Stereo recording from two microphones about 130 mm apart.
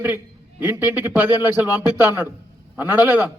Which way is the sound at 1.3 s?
30° left (ahead or behind).